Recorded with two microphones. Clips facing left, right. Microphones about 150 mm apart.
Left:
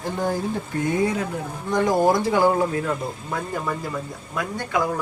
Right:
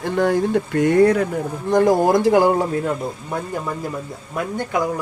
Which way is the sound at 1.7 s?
45° right (ahead or behind).